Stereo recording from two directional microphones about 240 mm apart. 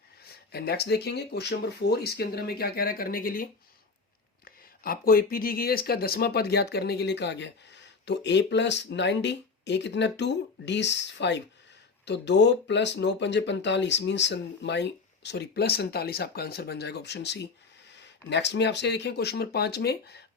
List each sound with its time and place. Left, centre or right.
0.5 s speech: left